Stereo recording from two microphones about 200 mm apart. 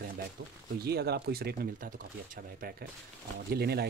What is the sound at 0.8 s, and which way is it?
Speech, 55° right (ahead or behind).